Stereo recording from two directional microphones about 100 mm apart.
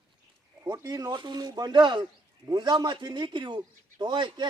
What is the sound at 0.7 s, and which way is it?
Speech, 40° right (ahead or behind).